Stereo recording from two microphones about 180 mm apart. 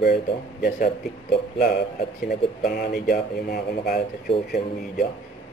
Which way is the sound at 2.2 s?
60° left (ahead or behind).